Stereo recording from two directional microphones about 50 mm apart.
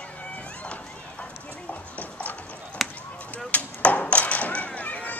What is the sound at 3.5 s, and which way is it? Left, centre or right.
Chop, left.